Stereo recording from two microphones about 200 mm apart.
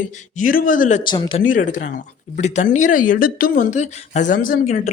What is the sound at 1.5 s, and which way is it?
Speech, 40° left (ahead or behind).